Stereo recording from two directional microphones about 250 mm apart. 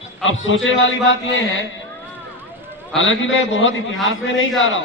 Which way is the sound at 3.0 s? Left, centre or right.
Left.